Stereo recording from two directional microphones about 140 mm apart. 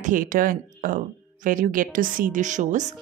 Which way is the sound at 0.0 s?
75° right (ahead or behind).